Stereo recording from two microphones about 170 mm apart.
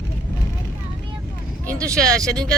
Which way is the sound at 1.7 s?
5° left (ahead or behind).